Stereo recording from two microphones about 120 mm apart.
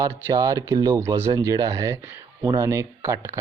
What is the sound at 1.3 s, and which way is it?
Speech, 35° right (ahead or behind).